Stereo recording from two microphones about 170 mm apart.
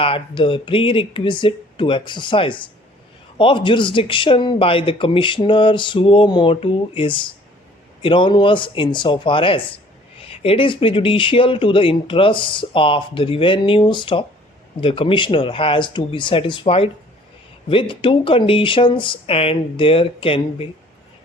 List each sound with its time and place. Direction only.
0.0 s speech: 30° left (ahead or behind)